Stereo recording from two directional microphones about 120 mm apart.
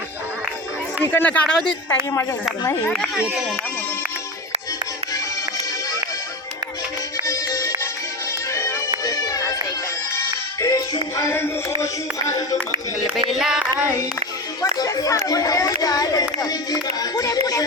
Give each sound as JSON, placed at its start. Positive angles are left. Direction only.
{"t": 1.1, "sound": "speech", "side_deg": 10}
{"t": 7.3, "sound": "music", "side_deg": 30}
{"t": 9.0, "sound": "music", "side_deg": 30}
{"t": 10.6, "sound": "music", "side_deg": 30}
{"t": 13.3, "sound": "speech", "side_deg": -5}
{"t": 14.6, "sound": "speech", "side_deg": 30}